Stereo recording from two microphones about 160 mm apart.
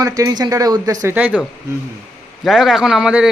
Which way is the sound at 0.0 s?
20° right (ahead or behind).